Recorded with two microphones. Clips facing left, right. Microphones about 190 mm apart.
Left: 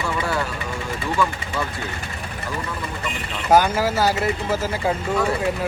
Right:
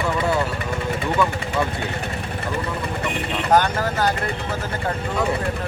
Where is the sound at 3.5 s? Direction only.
10° left (ahead or behind).